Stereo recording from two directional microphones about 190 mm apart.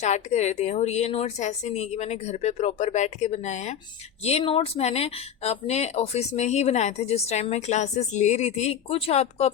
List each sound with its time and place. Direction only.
0.0 s speech: 40° left (ahead or behind)